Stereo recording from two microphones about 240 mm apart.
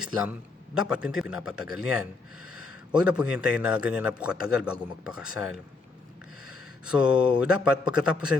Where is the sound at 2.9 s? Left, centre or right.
Centre.